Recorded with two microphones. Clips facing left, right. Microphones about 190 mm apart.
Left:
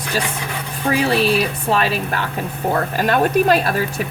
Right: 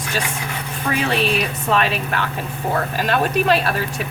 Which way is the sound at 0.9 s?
35° left (ahead or behind).